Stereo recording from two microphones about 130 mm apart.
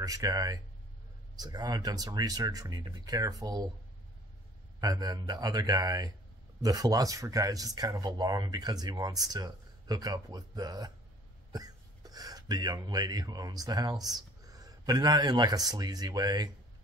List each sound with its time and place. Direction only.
0.0 s speech: 25° right (ahead or behind)
4.7 s speech: 30° right (ahead or behind)